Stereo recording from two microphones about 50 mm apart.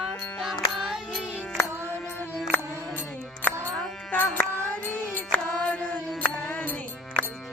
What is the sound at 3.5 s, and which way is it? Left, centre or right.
Music, left.